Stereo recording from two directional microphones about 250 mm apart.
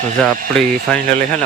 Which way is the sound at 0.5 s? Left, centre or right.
Centre.